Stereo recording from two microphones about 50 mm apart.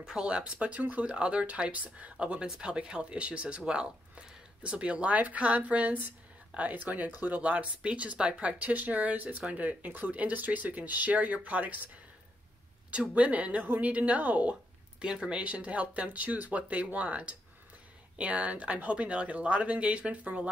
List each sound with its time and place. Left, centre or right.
0.0 s speech: centre
2.4 s speech: centre
12.9 s speech: right